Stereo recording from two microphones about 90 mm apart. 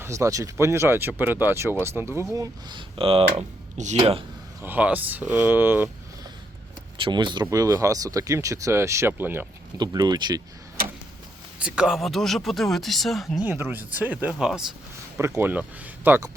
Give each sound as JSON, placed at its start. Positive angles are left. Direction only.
{"t": 0.0, "sound": "speech", "side_deg": -35}
{"t": 2.6, "sound": "speech", "side_deg": -65}
{"t": 4.6, "sound": "speech", "side_deg": -20}
{"t": 7.0, "sound": "speech", "side_deg": -60}
{"t": 7.5, "sound": "speech", "side_deg": -40}
{"t": 9.7, "sound": "speech", "side_deg": -50}
{"t": 11.6, "sound": "speech", "side_deg": -10}
{"t": 11.9, "sound": "speech", "side_deg": 0}
{"t": 13.4, "sound": "speech", "side_deg": -20}
{"t": 15.2, "sound": "speech", "side_deg": -30}